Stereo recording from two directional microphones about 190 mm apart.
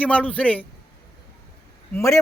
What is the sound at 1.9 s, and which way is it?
Speech, 15° left (ahead or behind).